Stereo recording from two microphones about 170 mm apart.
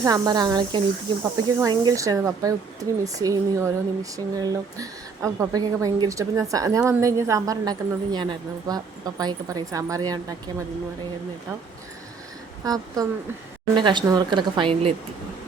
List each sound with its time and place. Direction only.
0.0 s a woman's voice: 20° right (ahead or behind)
1.2 s a woman's voice: 15° right (ahead or behind)
12.6 s a woman's voice: 20° right (ahead or behind)